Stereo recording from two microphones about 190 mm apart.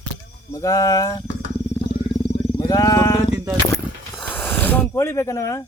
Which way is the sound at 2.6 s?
20° left (ahead or behind).